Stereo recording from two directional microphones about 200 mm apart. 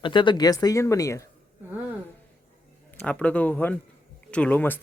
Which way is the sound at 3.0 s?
5° left (ahead or behind).